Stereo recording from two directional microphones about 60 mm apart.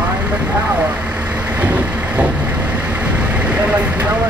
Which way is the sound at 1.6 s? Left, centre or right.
Right.